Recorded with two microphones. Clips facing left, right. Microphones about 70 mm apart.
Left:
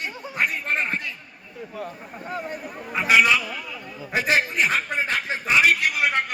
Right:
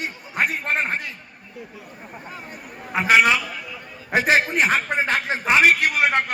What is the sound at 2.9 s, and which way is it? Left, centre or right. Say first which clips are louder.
Speech: right 3 dB; right.